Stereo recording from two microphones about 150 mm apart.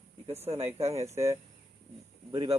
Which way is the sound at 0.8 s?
45° right (ahead or behind).